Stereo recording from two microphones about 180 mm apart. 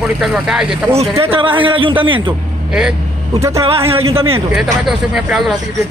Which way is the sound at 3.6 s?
30° right (ahead or behind).